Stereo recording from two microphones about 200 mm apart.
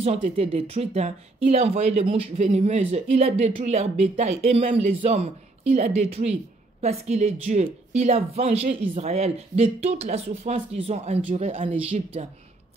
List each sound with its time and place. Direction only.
0.0 s speech: 30° right (ahead or behind)